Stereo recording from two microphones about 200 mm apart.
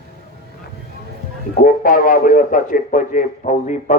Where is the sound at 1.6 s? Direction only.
45° left (ahead or behind).